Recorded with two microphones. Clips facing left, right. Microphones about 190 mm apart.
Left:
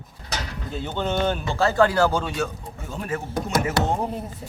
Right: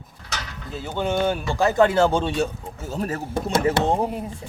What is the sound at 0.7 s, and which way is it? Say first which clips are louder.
Speech: right 2 dB; 5° right (ahead or behind).